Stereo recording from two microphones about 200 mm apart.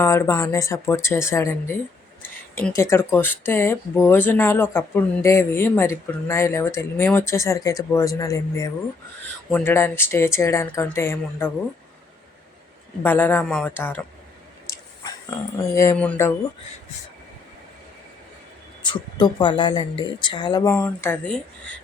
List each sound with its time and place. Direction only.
0.0 s speech: 15° left (ahead or behind)
13.0 s speech: 10° left (ahead or behind)
15.6 s speech: 15° left (ahead or behind)
18.8 s a woman's voice: 25° left (ahead or behind); by 21.8 s 5° left (ahead or behind)